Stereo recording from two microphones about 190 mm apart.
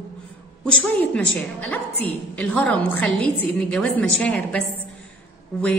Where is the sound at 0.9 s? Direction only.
5° left (ahead or behind).